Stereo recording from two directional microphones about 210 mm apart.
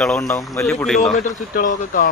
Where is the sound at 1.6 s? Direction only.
40° left (ahead or behind).